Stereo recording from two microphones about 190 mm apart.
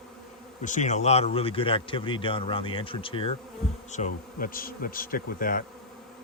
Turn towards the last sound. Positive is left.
turn(degrees=50)  # may be behind; listen again after turning